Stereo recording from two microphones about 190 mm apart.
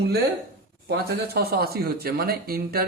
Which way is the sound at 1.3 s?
55° right (ahead or behind).